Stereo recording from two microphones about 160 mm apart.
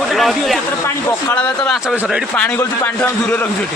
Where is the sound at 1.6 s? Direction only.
5° left (ahead or behind).